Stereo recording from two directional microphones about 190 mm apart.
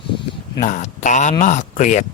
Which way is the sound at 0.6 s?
40° left (ahead or behind).